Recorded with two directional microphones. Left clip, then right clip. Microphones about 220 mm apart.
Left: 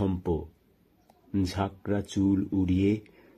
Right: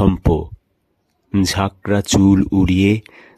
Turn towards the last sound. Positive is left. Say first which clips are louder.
# right 10 dB
turn(degrees=-45)  # may be behind; listen again after turning